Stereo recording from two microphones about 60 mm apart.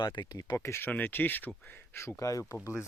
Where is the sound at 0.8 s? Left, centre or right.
Left.